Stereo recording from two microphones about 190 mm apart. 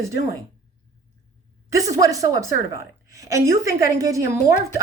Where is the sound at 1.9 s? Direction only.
15° right (ahead or behind).